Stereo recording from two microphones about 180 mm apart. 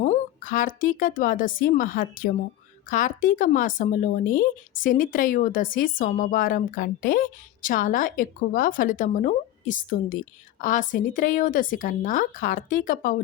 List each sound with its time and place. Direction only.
0.0 s speech: 45° left (ahead or behind)